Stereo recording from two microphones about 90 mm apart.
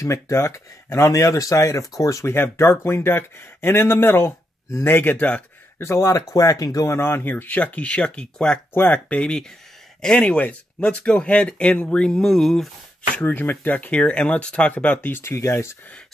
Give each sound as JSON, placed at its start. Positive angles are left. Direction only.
{"t": 0.0, "sound": "speech", "side_deg": 35}
{"t": 5.8, "sound": "speech", "side_deg": 35}
{"t": 13.1, "sound": "speech", "side_deg": 20}